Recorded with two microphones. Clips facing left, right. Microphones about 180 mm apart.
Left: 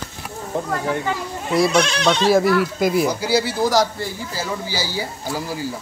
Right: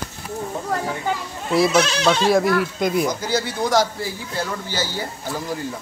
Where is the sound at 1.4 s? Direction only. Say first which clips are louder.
Even; centre (ahead or behind).